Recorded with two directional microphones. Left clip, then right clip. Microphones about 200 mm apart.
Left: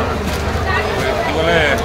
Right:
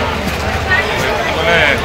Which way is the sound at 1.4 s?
50° left (ahead or behind).